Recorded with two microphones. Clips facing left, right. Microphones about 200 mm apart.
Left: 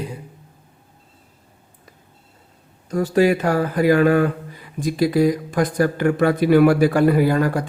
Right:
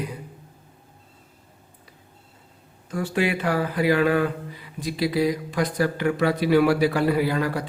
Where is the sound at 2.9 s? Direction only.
40° left (ahead or behind).